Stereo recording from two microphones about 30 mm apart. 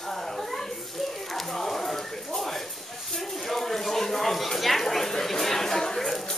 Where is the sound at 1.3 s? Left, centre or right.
Centre.